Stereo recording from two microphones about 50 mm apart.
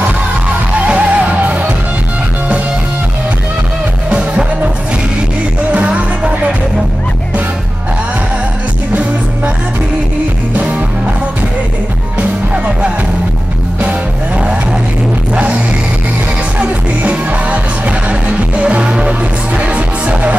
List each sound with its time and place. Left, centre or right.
0.7 s music: right
4.1 s music: right
5.7 s music: right
12.2 s music: right
16.5 s music: right